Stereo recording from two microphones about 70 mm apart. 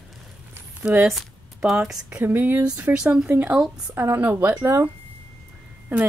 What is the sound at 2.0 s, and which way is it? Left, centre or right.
Speech, right.